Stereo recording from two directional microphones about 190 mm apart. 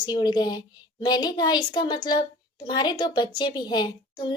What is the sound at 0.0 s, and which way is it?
A woman's voice, 20° left (ahead or behind).